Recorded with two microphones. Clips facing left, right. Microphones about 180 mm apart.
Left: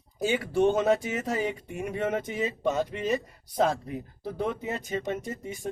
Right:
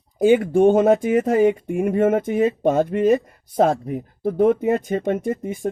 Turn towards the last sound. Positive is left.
turn(degrees=-50)  # may be behind; listen again after turning